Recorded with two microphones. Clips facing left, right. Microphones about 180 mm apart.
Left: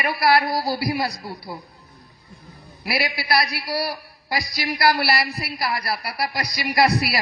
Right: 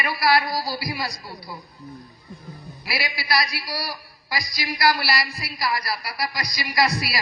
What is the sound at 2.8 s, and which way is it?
A man's voice, 60° left (ahead or behind).